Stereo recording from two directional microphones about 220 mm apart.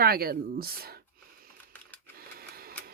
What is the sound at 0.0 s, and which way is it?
Speech, 45° right (ahead or behind).